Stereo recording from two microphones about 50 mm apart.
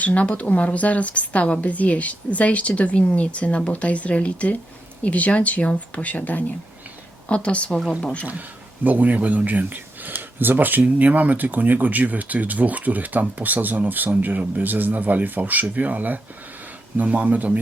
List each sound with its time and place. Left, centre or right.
0.0 s speech: left
8.3 s speech: right